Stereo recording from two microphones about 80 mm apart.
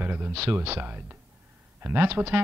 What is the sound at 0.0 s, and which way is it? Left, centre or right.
A man's voice, right.